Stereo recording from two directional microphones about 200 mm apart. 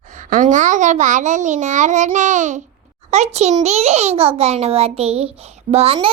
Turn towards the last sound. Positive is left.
turn(degrees=-30)  # may be behind; listen again after turning